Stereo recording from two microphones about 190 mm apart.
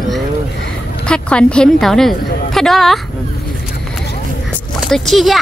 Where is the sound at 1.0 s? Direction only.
5° left (ahead or behind).